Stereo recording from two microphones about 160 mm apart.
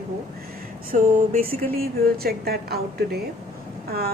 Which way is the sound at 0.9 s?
65° right (ahead or behind).